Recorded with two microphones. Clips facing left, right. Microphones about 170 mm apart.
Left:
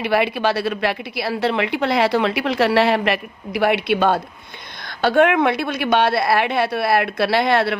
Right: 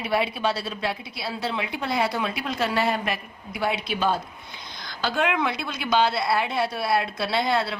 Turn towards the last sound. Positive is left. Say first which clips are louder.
# left 7 dB
turn(degrees=70)  # may be behind; listen again after turning